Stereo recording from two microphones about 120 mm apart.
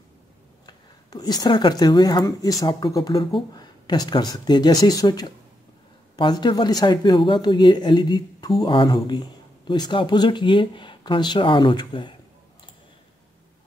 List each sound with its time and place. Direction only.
0.7 s speech: 35° left (ahead or behind)